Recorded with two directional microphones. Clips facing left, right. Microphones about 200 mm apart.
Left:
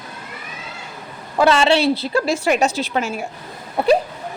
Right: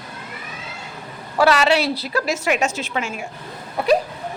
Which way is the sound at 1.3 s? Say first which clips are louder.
Left 2 dB; 25° left (ahead or behind).